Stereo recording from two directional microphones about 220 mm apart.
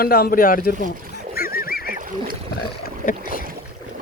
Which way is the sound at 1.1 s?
45° left (ahead or behind).